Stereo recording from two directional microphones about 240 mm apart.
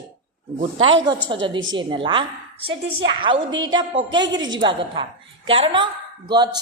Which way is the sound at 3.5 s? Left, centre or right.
Right.